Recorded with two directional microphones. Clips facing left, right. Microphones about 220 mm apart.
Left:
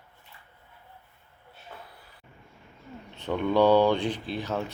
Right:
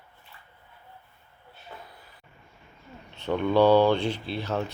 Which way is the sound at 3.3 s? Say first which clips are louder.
Right 1 dB; 15° left (ahead or behind).